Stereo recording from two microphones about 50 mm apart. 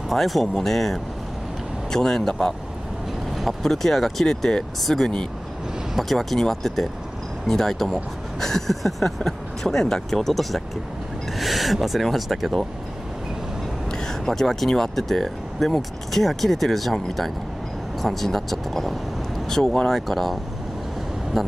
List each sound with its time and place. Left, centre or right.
0.1 s speech: centre
13.9 s speech: centre
21.4 s speech: centre